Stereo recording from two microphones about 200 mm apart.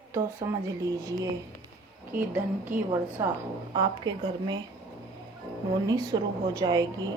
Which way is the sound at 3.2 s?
15° right (ahead or behind).